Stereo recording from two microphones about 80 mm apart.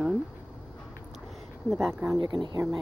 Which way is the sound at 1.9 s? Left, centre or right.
Right.